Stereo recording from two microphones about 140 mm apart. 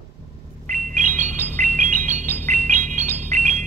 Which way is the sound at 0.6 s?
65° right (ahead or behind).